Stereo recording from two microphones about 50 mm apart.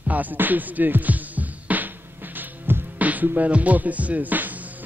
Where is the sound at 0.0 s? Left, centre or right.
Right.